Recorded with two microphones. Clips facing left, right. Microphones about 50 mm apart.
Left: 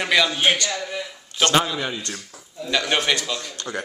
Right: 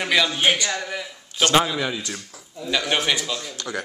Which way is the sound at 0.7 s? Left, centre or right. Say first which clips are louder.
Right 1 dB; right.